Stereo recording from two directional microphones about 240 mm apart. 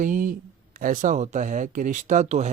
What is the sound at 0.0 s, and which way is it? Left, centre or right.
Speech, right.